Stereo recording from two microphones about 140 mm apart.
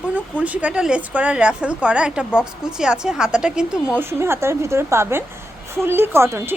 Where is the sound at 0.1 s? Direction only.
10° right (ahead or behind).